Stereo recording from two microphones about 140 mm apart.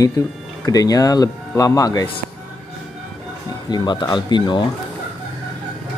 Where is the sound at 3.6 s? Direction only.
30° left (ahead or behind).